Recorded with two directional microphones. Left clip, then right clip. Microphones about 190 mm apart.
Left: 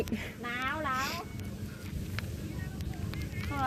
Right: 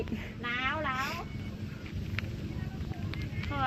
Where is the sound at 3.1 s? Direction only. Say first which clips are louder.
Right 1 dB; 25° left (ahead or behind).